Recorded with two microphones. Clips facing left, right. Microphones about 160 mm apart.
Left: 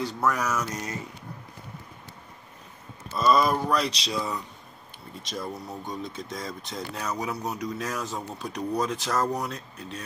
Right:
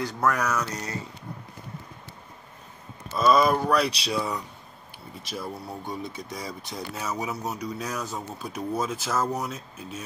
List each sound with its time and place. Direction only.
0.2 s speech: 10° left (ahead or behind)
0.5 s speech: 25° left (ahead or behind)
3.2 s speech: centre (ahead or behind)